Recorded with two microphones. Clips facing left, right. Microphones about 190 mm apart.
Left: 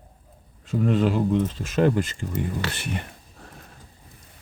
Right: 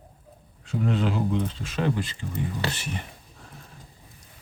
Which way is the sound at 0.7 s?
45° left (ahead or behind).